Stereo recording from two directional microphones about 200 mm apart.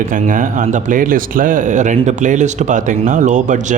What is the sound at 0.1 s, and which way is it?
Speech, 40° right (ahead or behind).